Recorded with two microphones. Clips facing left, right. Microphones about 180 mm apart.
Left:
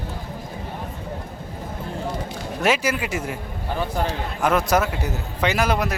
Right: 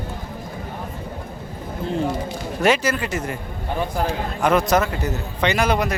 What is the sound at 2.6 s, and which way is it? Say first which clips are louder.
Speech: right 2 dB; 10° left (ahead or behind).